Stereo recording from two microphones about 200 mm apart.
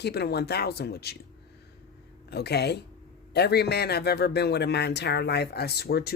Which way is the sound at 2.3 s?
55° left (ahead or behind).